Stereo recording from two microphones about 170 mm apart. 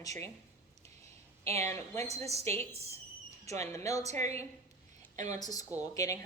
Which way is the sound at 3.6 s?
20° left (ahead or behind).